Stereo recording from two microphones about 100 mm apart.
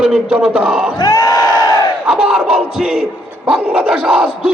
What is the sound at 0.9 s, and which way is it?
Crowd, 45° left (ahead or behind).